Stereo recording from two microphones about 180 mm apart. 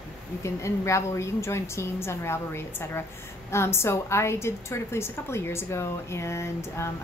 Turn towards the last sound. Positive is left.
turn(degrees=15)  # may be behind; listen again after turning